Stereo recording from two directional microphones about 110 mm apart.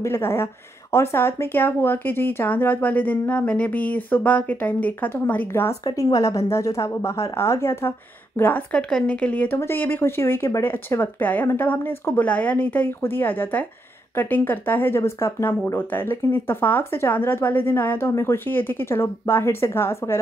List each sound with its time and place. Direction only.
0.0 s speech: 25° left (ahead or behind)